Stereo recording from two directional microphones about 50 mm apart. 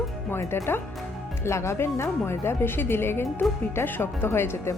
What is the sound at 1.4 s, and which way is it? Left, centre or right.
Speech, left.